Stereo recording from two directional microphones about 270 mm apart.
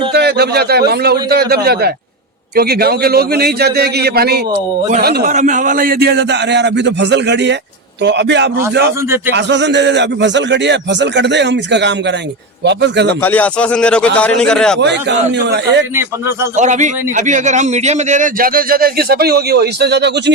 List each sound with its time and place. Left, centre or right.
0.1 s a man's voice: right
9.0 s a man's voice: centre
9.3 s a man's voice: right
13.2 s a man's voice: centre
14.8 s a man's voice: right
16.0 s a man's voice: centre
16.6 s a man's voice: right